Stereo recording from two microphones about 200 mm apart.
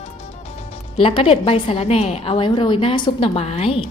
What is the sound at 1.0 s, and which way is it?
A woman's voice, 25° left (ahead or behind).